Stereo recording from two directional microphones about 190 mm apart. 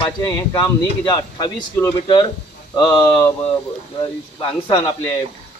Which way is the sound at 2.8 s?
20° left (ahead or behind).